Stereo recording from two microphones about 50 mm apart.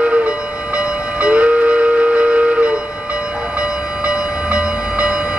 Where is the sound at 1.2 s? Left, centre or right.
Right.